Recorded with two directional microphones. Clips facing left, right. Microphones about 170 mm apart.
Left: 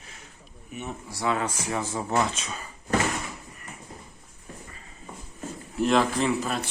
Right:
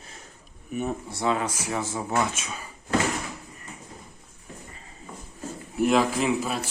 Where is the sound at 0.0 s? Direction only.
35° right (ahead or behind).